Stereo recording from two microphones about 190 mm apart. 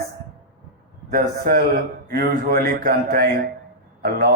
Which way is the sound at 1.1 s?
50° right (ahead or behind).